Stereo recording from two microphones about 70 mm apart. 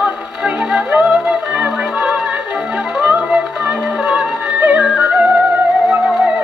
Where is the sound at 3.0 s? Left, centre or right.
Centre.